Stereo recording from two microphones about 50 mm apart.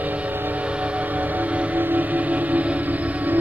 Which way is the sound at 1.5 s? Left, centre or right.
Right.